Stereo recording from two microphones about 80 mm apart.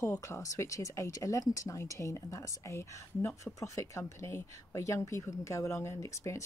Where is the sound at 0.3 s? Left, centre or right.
Left.